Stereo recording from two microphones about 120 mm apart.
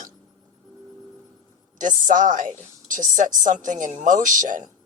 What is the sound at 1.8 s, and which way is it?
Speech, 90° right.